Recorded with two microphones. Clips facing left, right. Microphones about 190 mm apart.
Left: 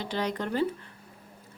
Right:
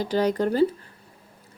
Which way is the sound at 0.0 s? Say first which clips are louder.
Right 8 dB; 40° right (ahead or behind).